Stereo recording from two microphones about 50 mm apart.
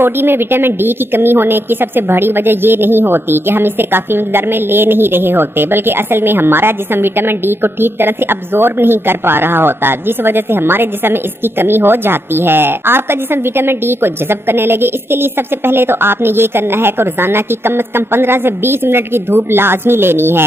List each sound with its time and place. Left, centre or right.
0.0 s a woman's voice: right